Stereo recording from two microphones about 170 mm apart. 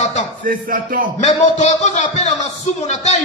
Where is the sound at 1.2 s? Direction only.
40° left (ahead or behind).